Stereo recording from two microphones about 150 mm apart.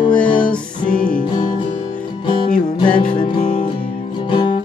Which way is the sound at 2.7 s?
30° left (ahead or behind).